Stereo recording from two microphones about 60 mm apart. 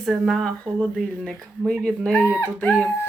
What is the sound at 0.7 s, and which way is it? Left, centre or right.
Speech, centre.